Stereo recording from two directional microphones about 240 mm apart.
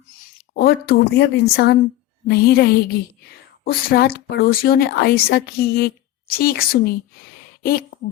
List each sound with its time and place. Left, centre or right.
0.2 s a woman's voice: left